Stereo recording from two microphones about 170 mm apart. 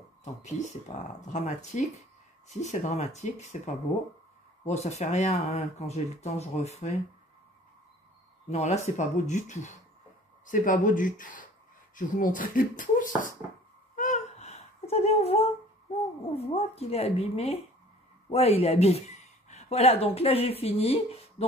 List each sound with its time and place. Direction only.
1.2 s speech: 45° left (ahead or behind)
8.5 s speech: 40° left (ahead or behind)
13.9 s a sound: 45° left (ahead or behind)
16.3 s speech: 35° left (ahead or behind)